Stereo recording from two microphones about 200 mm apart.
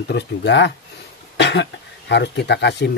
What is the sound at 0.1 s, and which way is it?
Speech, 60° left (ahead or behind).